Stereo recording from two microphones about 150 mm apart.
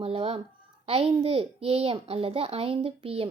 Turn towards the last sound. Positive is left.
turn(degrees=-40)  # may be behind; listen again after turning